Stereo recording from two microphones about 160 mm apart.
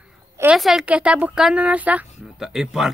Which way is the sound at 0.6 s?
Centre (ahead or behind).